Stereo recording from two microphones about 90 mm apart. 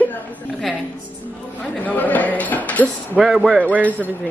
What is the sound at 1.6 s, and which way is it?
Speech, 15° left (ahead or behind).